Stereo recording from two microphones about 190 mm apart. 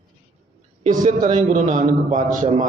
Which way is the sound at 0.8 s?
40° right (ahead or behind).